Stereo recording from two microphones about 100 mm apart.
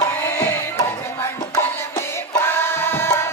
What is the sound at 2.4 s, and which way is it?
Music, 20° left (ahead or behind).